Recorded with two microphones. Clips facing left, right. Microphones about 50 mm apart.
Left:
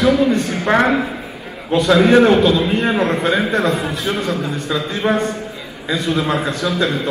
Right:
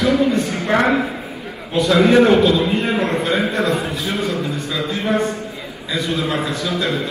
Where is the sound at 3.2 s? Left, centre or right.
Left.